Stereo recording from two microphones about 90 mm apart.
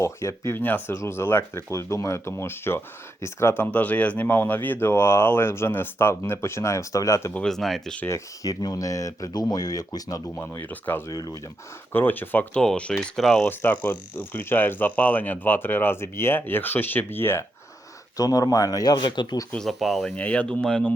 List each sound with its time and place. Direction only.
0.0 s speech: 35° left (ahead or behind)
3.6 s speech: 15° left (ahead or behind); by 7.3 s 35° left (ahead or behind)
7.4 s speech: 5° left (ahead or behind)
8.0 s speech: 30° left (ahead or behind)
10.2 s speech: 25° left (ahead or behind)
11.1 s speech: 40° left (ahead or behind)
11.9 s speech: 20° left (ahead or behind)
12.6 s speech: 10° left (ahead or behind)
13.4 s speech: 25° left (ahead or behind)
18.2 s speech: 45° left (ahead or behind)
18.9 s speech: 60° left (ahead or behind)
19.5 s speech: centre (ahead or behind)
20.1 s speech: 15° left (ahead or behind)